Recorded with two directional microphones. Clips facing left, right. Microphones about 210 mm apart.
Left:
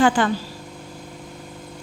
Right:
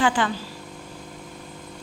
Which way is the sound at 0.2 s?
45° left (ahead or behind).